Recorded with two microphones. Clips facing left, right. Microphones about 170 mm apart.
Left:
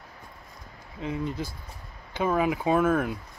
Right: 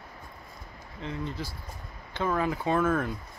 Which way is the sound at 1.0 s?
15° left (ahead or behind).